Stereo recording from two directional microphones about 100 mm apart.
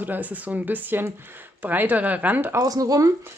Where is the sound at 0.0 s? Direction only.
15° right (ahead or behind).